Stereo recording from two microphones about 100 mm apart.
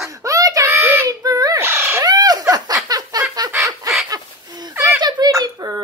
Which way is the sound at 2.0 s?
40° right (ahead or behind).